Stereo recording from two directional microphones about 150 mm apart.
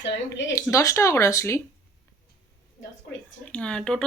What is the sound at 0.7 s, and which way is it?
Speech, 20° left (ahead or behind).